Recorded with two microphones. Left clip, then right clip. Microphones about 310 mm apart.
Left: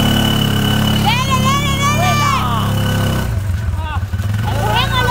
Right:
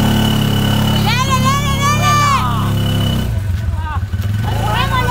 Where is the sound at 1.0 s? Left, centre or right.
Centre.